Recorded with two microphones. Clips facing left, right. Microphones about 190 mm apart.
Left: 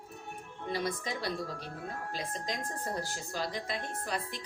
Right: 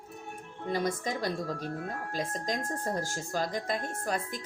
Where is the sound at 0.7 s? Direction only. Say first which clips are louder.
Right 4 dB; 45° right (ahead or behind).